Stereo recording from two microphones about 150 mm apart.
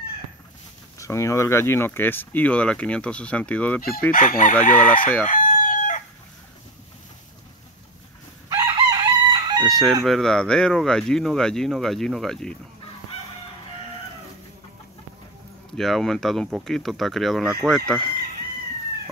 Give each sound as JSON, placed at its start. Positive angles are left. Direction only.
{"t": 0.9, "sound": "speech", "side_deg": 20}
{"t": 4.1, "sound": "chicken", "side_deg": 60}
{"t": 5.2, "sound": "crowing", "side_deg": 60}
{"t": 8.5, "sound": "chicken", "side_deg": -30}
{"t": 9.7, "sound": "chicken", "side_deg": 0}
{"t": 10.0, "sound": "speech", "side_deg": 5}
{"t": 15.8, "sound": "speech", "side_deg": 0}